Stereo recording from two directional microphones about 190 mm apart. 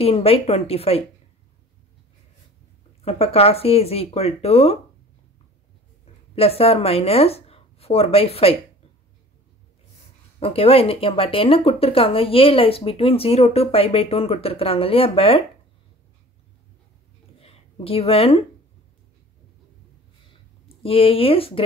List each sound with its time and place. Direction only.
0.0 s speech: 30° left (ahead or behind)
3.0 s speech: 30° left (ahead or behind)
6.3 s speech: 30° left (ahead or behind)
10.4 s speech: 30° left (ahead or behind)
17.4 s a sound: 30° left (ahead or behind)
20.6 s speech: 30° left (ahead or behind)